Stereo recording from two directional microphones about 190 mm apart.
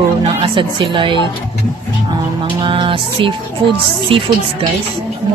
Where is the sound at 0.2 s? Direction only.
30° right (ahead or behind).